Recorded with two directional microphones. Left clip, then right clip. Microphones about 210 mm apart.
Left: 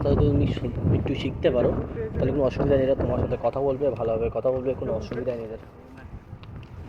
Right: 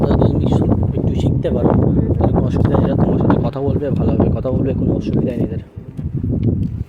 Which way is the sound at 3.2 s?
40° right (ahead or behind).